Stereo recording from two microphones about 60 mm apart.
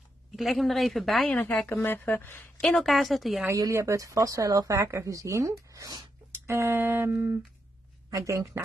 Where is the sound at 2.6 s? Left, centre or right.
Centre.